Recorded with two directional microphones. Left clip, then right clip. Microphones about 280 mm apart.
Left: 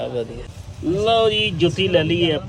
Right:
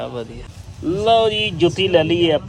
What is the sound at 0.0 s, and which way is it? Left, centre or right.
Speech, centre.